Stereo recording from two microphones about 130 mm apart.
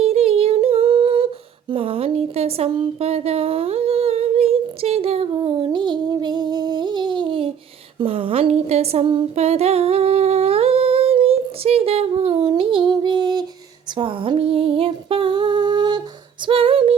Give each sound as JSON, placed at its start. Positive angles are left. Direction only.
{"t": 0.0, "sound": "humming", "side_deg": -50}
{"t": 1.7, "sound": "speech", "side_deg": -45}
{"t": 7.9, "sound": "a sound", "side_deg": -45}
{"t": 9.3, "sound": "humming", "side_deg": -50}
{"t": 13.9, "sound": "female singing", "side_deg": -40}